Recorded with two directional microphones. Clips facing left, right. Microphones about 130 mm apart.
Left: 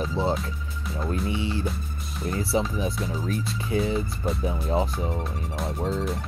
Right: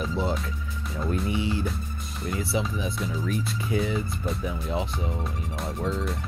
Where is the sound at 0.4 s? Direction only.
Centre (ahead or behind).